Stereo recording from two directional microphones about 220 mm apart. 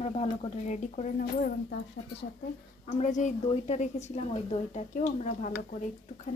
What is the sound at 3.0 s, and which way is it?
A woman's voice, 35° left (ahead or behind).